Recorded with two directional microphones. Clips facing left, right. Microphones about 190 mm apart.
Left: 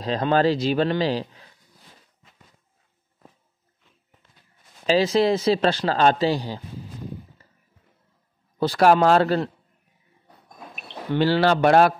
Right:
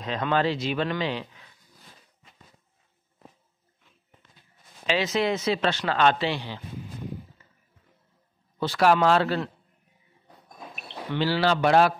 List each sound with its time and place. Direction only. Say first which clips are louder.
0.0 s a man's voice: left 5 dB; 35° left (ahead or behind)
4.8 s a man's voice: left 6 dB; 35° left (ahead or behind)
8.5 s a man's voice: left 4 dB; 40° left (ahead or behind)
11.1 s speech: left 5 dB; 55° left (ahead or behind)